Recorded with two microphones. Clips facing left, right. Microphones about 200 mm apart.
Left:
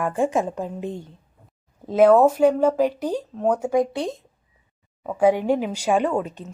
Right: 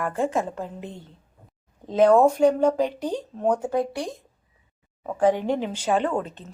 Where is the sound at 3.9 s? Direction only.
25° left (ahead or behind).